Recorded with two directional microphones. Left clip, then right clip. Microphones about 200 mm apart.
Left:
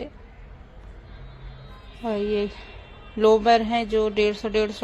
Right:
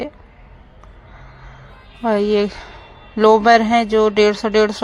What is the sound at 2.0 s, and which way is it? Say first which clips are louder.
Speech: right 9 dB; 30° right (ahead or behind).